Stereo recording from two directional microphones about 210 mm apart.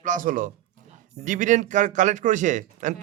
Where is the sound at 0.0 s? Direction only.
40° right (ahead or behind).